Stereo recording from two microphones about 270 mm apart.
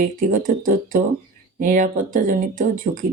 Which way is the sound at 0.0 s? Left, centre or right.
Right.